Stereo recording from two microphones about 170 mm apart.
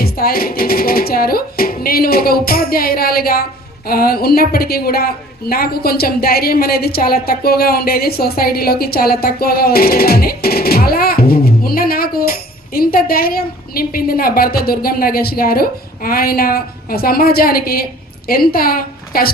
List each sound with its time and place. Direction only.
0.0 s a woman's voice: 60° left (ahead or behind)